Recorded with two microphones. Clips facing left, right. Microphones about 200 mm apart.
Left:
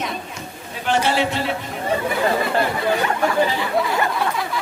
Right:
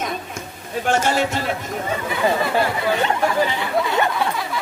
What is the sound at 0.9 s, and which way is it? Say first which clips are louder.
Speech: even; 45° right (ahead or behind).